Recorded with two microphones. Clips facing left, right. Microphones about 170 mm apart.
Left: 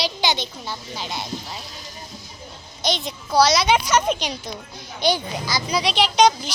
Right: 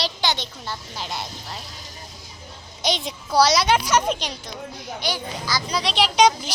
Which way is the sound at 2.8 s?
10° right (ahead or behind).